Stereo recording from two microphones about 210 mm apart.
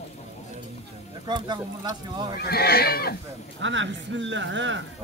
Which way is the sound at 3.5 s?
60° right (ahead or behind).